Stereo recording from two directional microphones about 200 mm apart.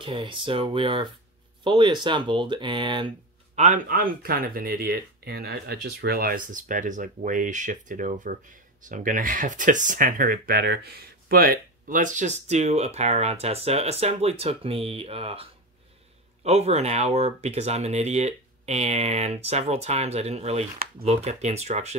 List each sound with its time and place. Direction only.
0.0 s speech: 25° right (ahead or behind)
3.5 s speech: 40° right (ahead or behind)
16.4 s speech: 30° right (ahead or behind)